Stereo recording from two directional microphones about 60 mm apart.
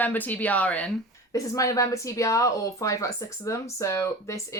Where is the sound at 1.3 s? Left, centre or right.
Left.